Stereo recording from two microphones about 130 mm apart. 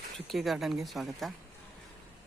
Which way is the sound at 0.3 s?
Centre (ahead or behind).